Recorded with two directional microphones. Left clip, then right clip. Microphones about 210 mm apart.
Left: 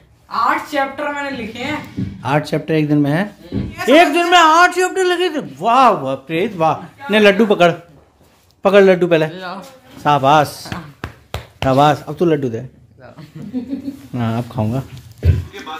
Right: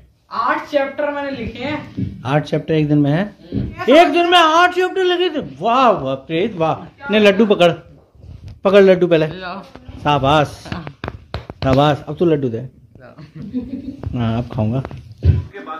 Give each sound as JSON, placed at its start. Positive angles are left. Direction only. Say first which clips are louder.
{"t": 0.3, "sound": "a woman's voice", "louder": "left 1 dB", "side_deg": 15}
{"t": 2.5, "sound": "a man's voice", "louder": "even", "side_deg": 25}